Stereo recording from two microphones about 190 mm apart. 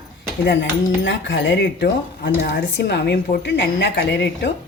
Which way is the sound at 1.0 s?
70° left (ahead or behind).